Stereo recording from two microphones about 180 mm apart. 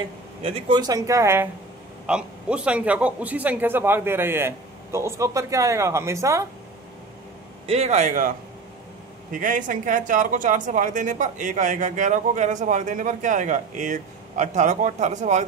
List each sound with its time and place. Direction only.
0.4 s a man's voice: 30° right (ahead or behind); by 6.4 s 15° right (ahead or behind)
7.6 s a man's voice: 35° right (ahead or behind)
9.3 s speech: 45° right (ahead or behind)